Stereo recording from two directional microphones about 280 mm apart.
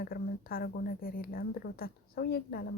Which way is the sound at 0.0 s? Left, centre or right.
Left.